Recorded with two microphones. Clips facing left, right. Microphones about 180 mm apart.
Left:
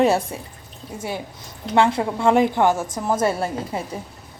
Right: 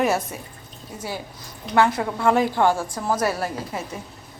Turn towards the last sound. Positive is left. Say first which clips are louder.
# left 3 dB
turn(degrees=25)  # may be behind; listen again after turning